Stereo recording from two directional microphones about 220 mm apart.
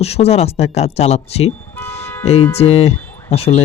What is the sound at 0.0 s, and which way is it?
Speech, 30° left (ahead or behind).